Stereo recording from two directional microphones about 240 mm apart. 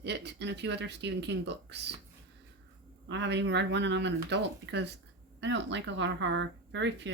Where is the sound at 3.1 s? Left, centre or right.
Right.